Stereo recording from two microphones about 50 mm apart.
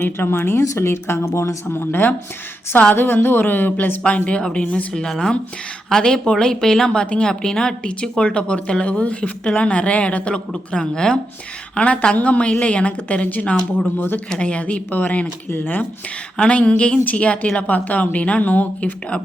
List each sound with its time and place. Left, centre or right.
0.0 s speech: left
1.6 s a sound: left
4.0 s a woman's voice: left
5.0 s a woman's voice: centre
5.9 s a woman's voice: centre
11.7 s a woman's voice: left
13.7 s speech: left
14.4 s a woman's voice: left
14.8 s a sound: left
16.4 s a woman's voice: left